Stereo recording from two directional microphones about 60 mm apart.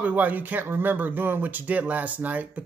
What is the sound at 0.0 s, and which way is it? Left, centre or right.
Speech, right.